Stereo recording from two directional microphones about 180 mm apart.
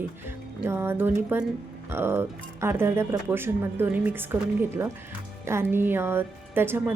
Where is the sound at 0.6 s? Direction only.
15° right (ahead or behind).